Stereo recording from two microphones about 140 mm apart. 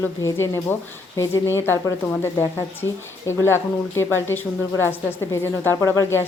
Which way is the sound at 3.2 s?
15° left (ahead or behind).